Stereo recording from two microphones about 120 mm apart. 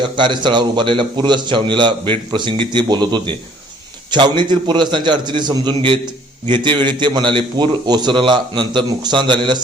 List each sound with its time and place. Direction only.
0.0 s a man's voice: 40° right (ahead or behind)